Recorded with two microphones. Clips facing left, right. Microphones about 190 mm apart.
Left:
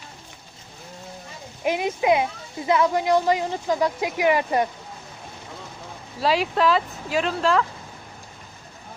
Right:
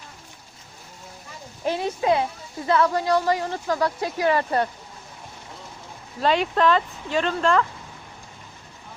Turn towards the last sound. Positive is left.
turn(degrees=5)  # may be behind; listen again after turning